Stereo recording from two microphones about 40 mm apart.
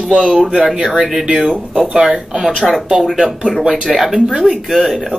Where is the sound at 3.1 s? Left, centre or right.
Centre.